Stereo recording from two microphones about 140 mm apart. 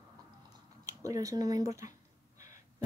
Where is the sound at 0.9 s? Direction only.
25° right (ahead or behind).